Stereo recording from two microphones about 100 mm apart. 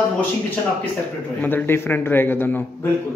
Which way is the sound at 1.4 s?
20° left (ahead or behind).